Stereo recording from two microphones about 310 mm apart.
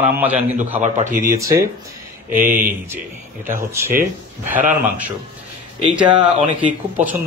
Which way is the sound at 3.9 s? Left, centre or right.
Right.